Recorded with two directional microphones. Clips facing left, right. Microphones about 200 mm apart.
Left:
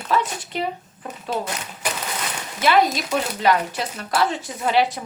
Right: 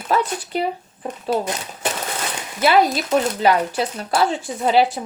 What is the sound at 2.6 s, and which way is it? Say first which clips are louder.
Speech: right 2 dB; 35° right (ahead or behind).